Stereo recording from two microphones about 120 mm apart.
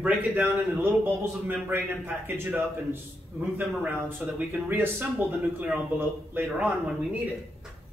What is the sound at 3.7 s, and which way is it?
Speech, 15° right (ahead or behind).